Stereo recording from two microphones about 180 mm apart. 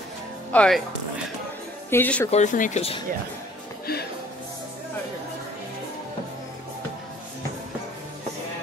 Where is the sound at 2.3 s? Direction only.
45° left (ahead or behind).